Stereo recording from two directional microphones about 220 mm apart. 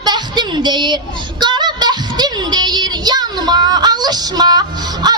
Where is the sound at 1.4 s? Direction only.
20° right (ahead or behind).